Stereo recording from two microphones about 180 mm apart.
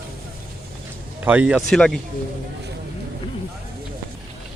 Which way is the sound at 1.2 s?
10° right (ahead or behind).